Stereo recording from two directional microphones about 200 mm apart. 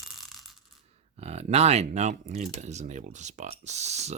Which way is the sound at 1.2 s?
30° right (ahead or behind).